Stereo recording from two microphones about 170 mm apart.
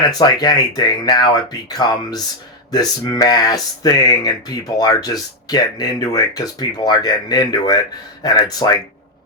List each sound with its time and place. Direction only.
0.0 s speech: 25° left (ahead or behind)